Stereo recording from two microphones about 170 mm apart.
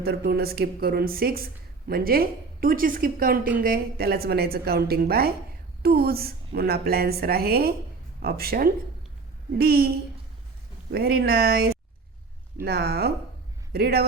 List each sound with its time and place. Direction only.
0.0 s a woman's voice: 65° right (ahead or behind)
10.9 s speech: 65° right (ahead or behind)